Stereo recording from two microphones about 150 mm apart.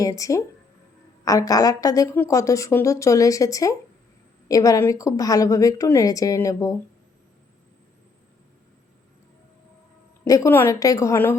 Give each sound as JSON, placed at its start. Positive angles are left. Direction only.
{"t": 0.0, "sound": "a woman's voice", "side_deg": 25}
{"t": 10.2, "sound": "a woman's voice", "side_deg": 20}